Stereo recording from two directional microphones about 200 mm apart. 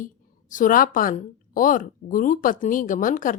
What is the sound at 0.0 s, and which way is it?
A woman's voice, 40° left (ahead or behind).